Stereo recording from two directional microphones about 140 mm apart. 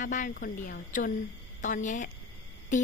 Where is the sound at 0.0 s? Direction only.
70° left (ahead or behind).